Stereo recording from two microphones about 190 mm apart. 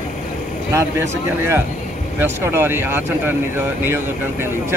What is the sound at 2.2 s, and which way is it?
Speech, 10° right (ahead or behind).